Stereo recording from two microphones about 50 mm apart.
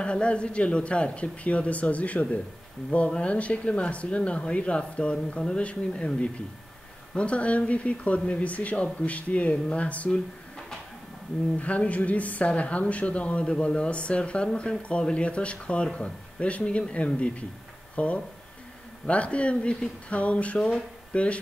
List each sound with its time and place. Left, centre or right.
0.0 s speech: left
11.5 s speech: left